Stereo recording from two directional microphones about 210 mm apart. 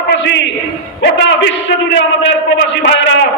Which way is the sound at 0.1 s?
55° left (ahead or behind).